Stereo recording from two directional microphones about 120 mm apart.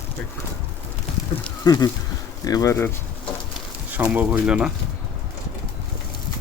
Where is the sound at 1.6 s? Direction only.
30° left (ahead or behind).